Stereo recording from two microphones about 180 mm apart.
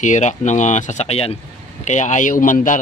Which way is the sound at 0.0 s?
40° left (ahead or behind).